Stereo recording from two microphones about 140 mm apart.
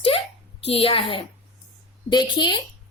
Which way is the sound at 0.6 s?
45° left (ahead or behind).